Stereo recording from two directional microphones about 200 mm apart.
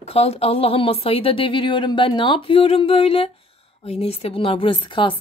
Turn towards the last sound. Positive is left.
turn(degrees=25)  # may be behind; listen again after turning